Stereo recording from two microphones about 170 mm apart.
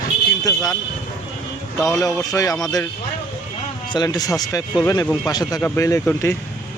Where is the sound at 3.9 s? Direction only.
25° left (ahead or behind).